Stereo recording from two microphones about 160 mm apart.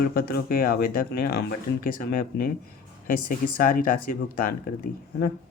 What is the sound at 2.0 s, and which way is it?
Speech, 65° left (ahead or behind).